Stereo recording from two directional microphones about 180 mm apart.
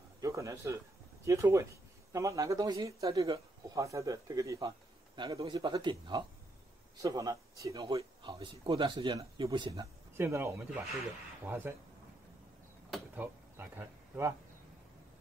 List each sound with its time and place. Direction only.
0.2 s speech: 15° right (ahead or behind)
10.1 s speech: 15° right (ahead or behind)
12.9 s a sound: 10° right (ahead or behind)